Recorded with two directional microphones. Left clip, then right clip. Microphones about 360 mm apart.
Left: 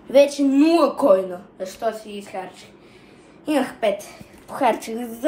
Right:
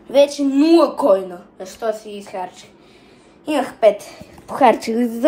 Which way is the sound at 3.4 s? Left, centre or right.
Centre.